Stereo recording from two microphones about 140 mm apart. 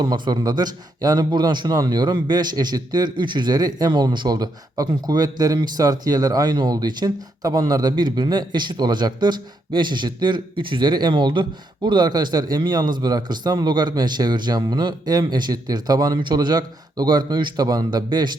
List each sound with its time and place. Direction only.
0.0 s a man's voice: 30° right (ahead or behind)